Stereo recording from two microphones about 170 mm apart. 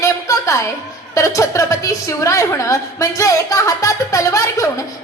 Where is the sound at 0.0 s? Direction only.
15° left (ahead or behind).